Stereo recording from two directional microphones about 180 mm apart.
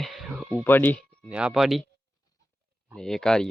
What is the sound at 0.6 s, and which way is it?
Speech, 10° left (ahead or behind).